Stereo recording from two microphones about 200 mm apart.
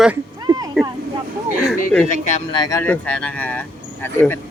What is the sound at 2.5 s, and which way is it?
Speech, 20° left (ahead or behind).